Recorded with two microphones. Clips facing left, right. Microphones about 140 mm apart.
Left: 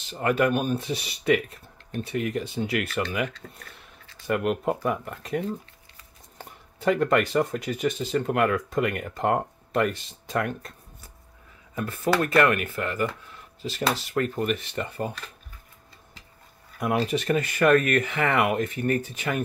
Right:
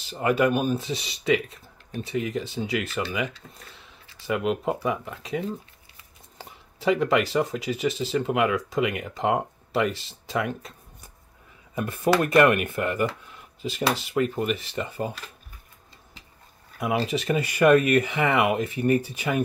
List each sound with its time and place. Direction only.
0.1 s speech: 10° right (ahead or behind)
4.3 s speech: centre (ahead or behind)
11.7 s speech: 15° right (ahead or behind)
16.8 s speech: 5° right (ahead or behind)